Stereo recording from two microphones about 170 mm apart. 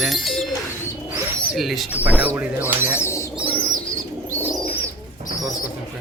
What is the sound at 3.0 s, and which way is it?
Bird, 15° left (ahead or behind).